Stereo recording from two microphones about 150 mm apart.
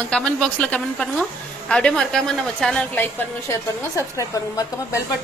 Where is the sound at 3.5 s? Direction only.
20° left (ahead or behind).